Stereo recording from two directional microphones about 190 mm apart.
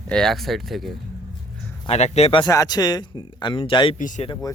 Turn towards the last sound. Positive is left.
turn(degrees=20)  # may be behind; listen again after turning